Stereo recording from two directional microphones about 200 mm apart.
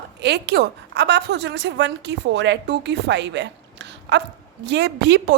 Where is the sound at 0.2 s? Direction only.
55° right (ahead or behind).